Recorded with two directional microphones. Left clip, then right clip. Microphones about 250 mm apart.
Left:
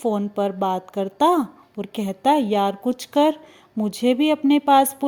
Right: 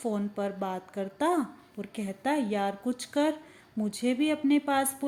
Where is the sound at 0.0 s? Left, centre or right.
Left.